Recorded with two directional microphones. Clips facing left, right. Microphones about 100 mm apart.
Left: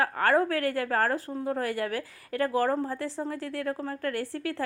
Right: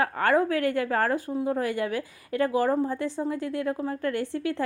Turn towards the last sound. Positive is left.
turn(degrees=-20)  # may be behind; listen again after turning